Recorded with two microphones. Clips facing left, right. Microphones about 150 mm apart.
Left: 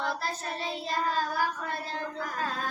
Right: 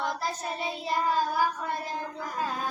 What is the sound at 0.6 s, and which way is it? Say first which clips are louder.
Child singing: right 2 dB; 15° right (ahead or behind).